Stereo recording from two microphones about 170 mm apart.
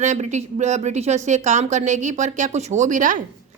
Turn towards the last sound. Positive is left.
turn(degrees=-50)  # may be behind; listen again after turning